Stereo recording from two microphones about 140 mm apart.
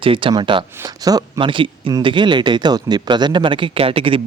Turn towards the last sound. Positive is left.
turn(degrees=-40)  # may be behind; listen again after turning